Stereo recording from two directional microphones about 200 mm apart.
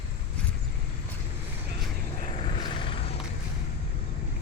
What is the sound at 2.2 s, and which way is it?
Vehicle, 30° left (ahead or behind).